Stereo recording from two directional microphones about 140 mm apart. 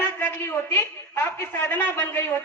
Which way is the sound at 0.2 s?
15° left (ahead or behind).